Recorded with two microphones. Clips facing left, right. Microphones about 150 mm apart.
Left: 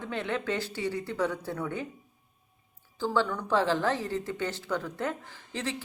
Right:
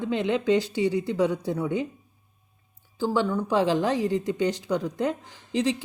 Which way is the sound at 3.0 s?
15° right (ahead or behind).